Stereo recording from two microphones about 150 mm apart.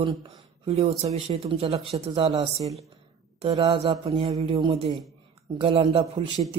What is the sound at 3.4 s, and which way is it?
Speech, 40° right (ahead or behind).